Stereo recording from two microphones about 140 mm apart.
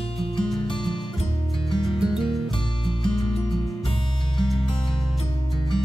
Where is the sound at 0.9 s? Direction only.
35° left (ahead or behind).